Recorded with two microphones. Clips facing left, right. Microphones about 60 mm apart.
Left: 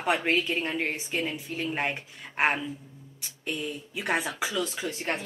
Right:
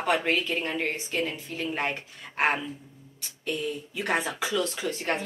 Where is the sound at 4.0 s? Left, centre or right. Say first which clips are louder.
Even; centre.